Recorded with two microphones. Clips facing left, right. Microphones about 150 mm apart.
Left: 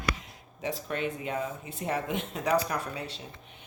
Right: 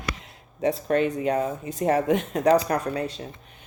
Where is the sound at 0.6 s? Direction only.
35° right (ahead or behind).